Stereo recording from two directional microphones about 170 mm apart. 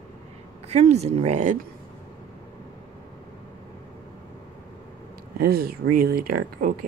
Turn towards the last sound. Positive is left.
turn(degrees=-60)  # may be behind; listen again after turning